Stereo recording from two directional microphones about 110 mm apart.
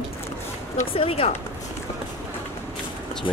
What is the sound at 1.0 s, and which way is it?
Speech, 60° left (ahead or behind).